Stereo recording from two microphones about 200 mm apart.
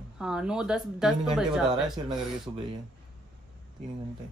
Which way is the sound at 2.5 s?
20° right (ahead or behind).